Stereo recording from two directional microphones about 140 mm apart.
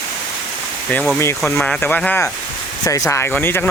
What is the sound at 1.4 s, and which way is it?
Speech, 5° left (ahead or behind).